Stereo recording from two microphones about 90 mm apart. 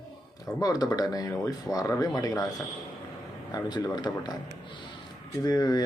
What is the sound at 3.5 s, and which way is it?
Speech, 50° left (ahead or behind).